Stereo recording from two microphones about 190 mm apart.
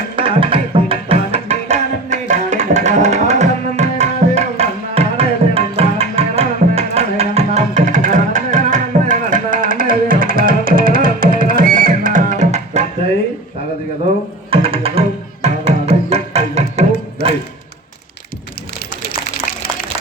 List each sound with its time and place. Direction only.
0.2 s tabla: 30° right (ahead or behind)
14.5 s music: 30° right (ahead or behind)